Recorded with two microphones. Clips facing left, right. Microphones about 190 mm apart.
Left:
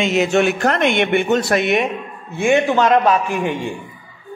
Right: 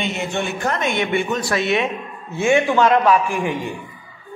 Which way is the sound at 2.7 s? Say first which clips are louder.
Left 1 dB; 20° left (ahead or behind).